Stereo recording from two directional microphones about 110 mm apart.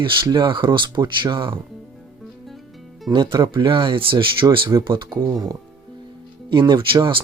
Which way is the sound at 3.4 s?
45° right (ahead or behind).